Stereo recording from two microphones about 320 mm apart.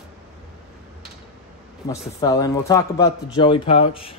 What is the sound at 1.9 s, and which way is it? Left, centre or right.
A man's voice, centre.